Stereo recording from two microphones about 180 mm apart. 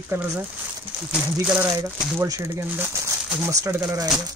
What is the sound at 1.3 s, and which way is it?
Speech, 10° right (ahead or behind).